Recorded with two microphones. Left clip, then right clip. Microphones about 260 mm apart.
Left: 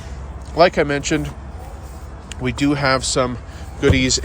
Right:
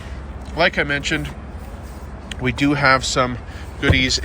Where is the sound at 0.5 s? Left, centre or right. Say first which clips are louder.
Left 3 dB; centre.